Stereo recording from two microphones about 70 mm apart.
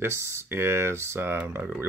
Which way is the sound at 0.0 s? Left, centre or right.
Right.